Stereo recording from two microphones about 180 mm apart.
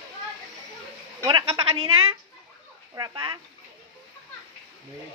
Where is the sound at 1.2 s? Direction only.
30° right (ahead or behind).